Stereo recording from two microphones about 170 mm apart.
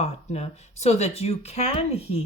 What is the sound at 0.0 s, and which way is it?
Speech, 40° left (ahead or behind).